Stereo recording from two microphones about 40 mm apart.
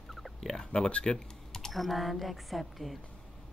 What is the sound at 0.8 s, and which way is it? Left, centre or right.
Speech, left.